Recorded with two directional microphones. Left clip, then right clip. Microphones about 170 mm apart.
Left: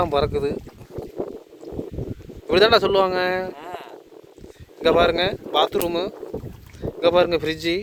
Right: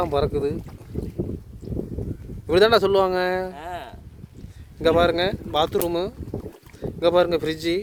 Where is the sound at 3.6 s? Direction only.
30° right (ahead or behind).